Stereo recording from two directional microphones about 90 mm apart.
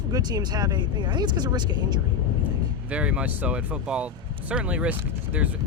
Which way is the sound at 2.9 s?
15° right (ahead or behind).